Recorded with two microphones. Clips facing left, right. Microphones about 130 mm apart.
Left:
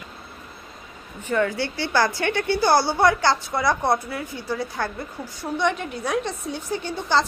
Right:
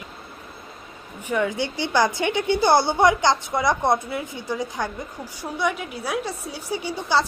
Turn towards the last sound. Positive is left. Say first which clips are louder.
# even
turn(degrees=-10)  # may be behind; listen again after turning